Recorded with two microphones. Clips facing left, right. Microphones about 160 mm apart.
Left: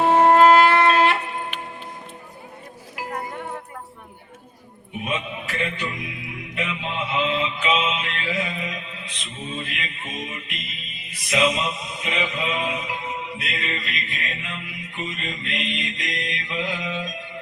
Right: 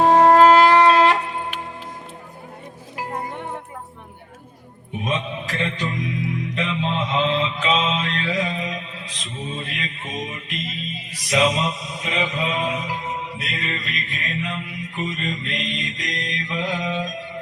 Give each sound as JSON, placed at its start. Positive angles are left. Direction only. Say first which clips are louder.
{"t": 0.0, "sound": "shofar", "louder": "right 2 dB", "side_deg": -35}
{"t": 2.9, "sound": "music", "louder": "right 2 dB", "side_deg": -25}
{"t": 5.0, "sound": "music", "louder": "right 3 dB", "side_deg": -35}